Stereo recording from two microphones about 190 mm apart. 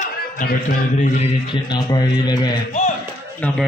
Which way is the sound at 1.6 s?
20° left (ahead or behind).